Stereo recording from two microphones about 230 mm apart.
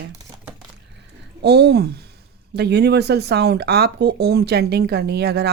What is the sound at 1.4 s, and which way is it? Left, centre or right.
Speech, right.